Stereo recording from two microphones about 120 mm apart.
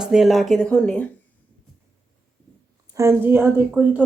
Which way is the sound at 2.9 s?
20° right (ahead or behind).